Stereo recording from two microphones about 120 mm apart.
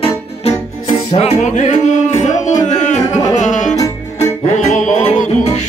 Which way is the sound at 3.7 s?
30° left (ahead or behind).